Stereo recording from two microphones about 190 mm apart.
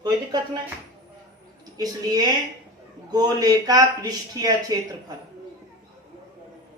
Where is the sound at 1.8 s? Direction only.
20° right (ahead or behind).